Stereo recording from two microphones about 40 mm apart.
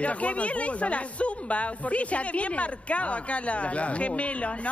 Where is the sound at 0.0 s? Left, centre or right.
Left.